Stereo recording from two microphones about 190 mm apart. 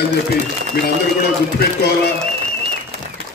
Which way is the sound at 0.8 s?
55° left (ahead or behind).